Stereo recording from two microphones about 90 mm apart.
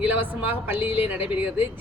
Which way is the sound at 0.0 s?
20° right (ahead or behind).